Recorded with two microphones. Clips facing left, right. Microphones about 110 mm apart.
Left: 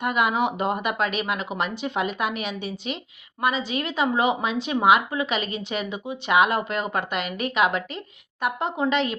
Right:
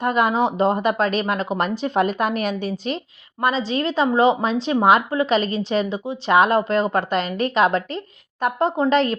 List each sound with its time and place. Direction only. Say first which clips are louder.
0.0 s a woman's voice: right 4 dB; 35° right (ahead or behind)